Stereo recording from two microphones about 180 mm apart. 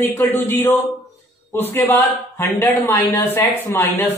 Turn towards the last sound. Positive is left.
turn(degrees=15)  # may be behind; listen again after turning